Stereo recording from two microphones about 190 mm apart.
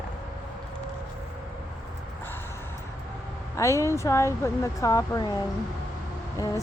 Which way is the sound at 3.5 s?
15° left (ahead or behind).